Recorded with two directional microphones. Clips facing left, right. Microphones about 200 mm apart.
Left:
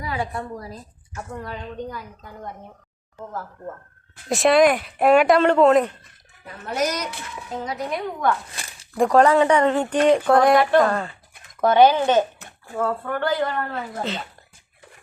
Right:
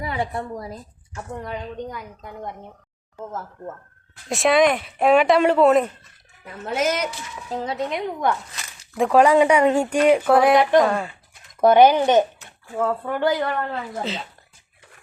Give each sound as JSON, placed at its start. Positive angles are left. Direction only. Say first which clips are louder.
{"t": 0.0, "sound": "a woman's voice", "louder": "right 1 dB", "side_deg": -25}
{"t": 4.3, "sound": "speech", "louder": "left 2 dB", "side_deg": 0}
{"t": 6.7, "sound": "speech", "louder": "right 2 dB", "side_deg": -25}
{"t": 8.5, "sound": "a sound", "louder": "left 1 dB", "side_deg": 30}
{"t": 9.0, "sound": "speech", "louder": "right 1 dB", "side_deg": -5}
{"t": 14.0, "sound": "speech", "louder": "left 3 dB", "side_deg": 0}